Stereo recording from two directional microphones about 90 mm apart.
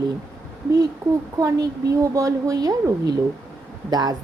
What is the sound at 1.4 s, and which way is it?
A woman's voice, 40° right (ahead or behind).